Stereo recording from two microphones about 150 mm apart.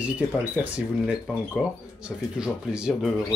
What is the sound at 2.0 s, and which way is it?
Speech, 5° right (ahead or behind).